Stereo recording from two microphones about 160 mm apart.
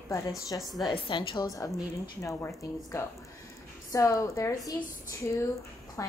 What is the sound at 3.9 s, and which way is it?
A woman's voice, 20° left (ahead or behind).